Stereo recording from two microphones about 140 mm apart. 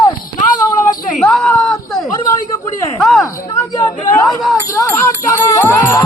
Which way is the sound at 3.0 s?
Centre (ahead or behind).